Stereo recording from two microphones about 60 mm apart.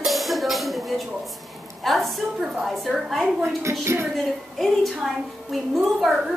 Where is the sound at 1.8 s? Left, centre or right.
Centre.